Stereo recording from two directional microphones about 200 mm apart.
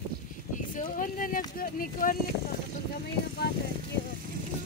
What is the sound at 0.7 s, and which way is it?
Speech, 40° left (ahead or behind).